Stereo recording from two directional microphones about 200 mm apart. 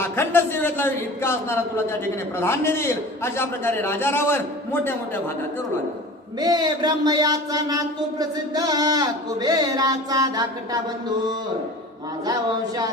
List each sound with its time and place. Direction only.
0.0 s a man's voice: 10° left (ahead or behind)
6.4 s a man's voice: 20° right (ahead or behind)
12.2 s a man's voice: 20° right (ahead or behind)